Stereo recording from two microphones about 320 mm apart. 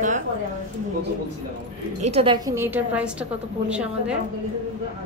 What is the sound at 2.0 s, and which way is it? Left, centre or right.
A woman's voice, centre.